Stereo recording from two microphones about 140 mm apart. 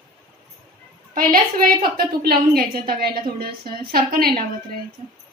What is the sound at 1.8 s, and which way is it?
A woman's voice, 90° right.